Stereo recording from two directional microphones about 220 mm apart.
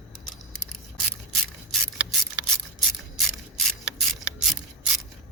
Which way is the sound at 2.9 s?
Centre (ahead or behind).